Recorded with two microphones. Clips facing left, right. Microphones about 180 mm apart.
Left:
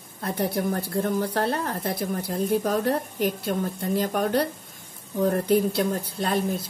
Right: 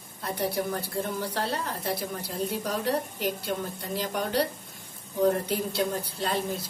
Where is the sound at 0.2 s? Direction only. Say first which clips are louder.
Left 3 dB; 55° left (ahead or behind).